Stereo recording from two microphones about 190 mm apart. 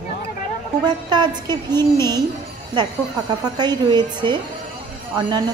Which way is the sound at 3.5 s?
20° right (ahead or behind).